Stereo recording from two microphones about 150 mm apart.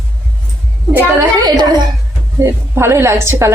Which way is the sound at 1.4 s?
25° right (ahead or behind).